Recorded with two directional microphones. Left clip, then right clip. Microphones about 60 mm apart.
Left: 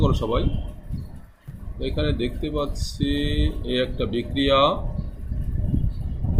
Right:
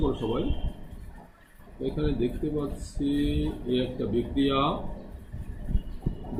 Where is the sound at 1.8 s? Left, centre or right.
Left.